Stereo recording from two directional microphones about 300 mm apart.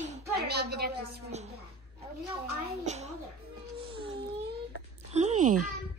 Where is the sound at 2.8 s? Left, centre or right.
Right.